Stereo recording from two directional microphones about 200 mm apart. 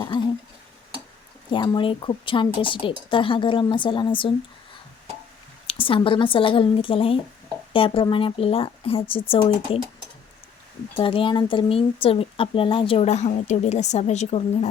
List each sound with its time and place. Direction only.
1.5 s speech: 25° left (ahead or behind)
5.6 s speech: 25° left (ahead or behind)
11.0 s speech: 25° left (ahead or behind)